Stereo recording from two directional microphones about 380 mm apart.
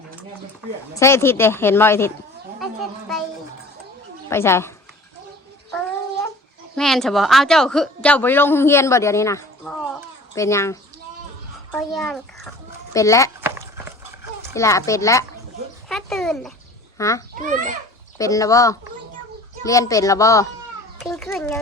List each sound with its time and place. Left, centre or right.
0.9 s speech: centre
4.3 s speech: centre
6.7 s a woman's voice: centre
14.5 s a child's voice: centre
17.4 s a child's voice: centre
18.2 s a woman's voice: centre